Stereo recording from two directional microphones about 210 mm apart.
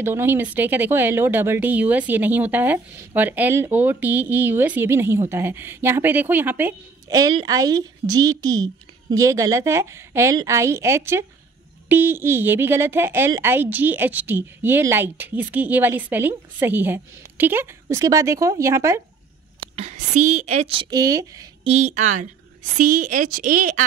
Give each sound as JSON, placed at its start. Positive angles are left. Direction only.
{"t": 0.0, "sound": "speech", "side_deg": -10}
{"t": 19.6, "sound": "a woman's voice", "side_deg": -30}
{"t": 21.6, "sound": "a woman's voice", "side_deg": -35}